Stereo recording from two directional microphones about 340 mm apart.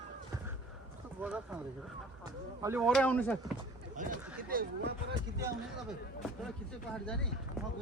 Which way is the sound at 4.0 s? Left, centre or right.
Right.